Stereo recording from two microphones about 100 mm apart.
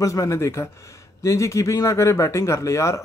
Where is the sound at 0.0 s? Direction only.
30° left (ahead or behind).